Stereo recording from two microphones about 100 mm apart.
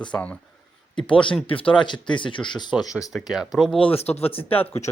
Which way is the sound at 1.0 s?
55° left (ahead or behind).